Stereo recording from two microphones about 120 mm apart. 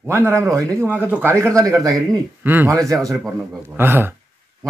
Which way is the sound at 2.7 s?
30° right (ahead or behind).